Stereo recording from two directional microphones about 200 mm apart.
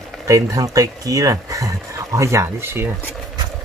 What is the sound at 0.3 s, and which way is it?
Speech, 15° right (ahead or behind).